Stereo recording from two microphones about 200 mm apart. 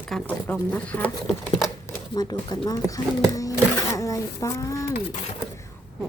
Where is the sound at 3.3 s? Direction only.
15° left (ahead or behind).